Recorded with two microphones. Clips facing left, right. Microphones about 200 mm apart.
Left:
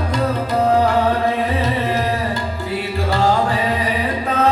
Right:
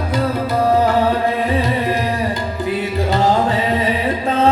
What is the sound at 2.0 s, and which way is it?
Music, 20° right (ahead or behind).